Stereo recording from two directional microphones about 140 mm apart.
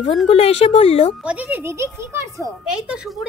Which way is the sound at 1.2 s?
10° right (ahead or behind).